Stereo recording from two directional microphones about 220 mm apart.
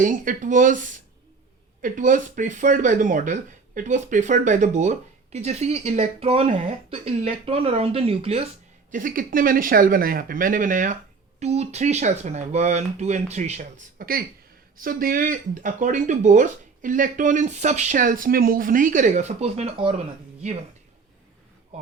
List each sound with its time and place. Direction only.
0.0 s speech: 35° right (ahead or behind)
8.9 s speech: 35° right (ahead or behind)
14.0 s speech: 40° right (ahead or behind); by 19.9 s 25° right (ahead or behind)